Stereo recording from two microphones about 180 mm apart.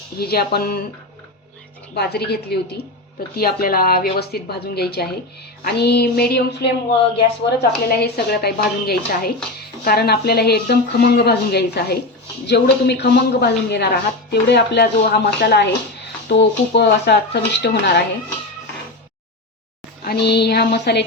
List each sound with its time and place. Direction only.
0.2 s speech: 60° left (ahead or behind)
2.0 s speech: 65° left (ahead or behind)
7.9 s speech: 65° left (ahead or behind)
20.1 s speech: 65° left (ahead or behind)